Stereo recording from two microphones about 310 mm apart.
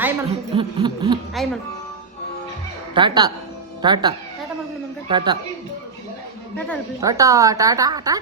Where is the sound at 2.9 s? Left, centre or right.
Centre.